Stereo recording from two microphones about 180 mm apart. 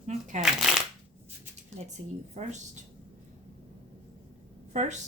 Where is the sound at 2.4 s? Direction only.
40° right (ahead or behind).